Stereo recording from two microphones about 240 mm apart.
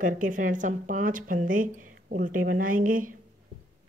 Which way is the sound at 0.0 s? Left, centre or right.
Right.